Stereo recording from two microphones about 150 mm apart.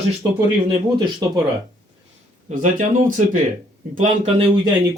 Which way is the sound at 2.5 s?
60° right (ahead or behind).